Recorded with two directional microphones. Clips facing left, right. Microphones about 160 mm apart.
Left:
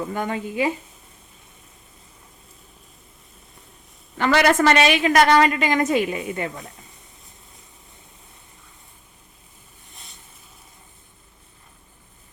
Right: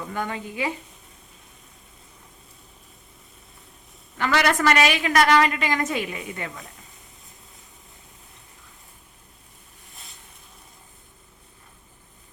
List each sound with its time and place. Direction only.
0.1 s a woman's voice: 25° left (ahead or behind)
4.2 s a woman's voice: 30° left (ahead or behind)
9.9 s a sound: centre (ahead or behind)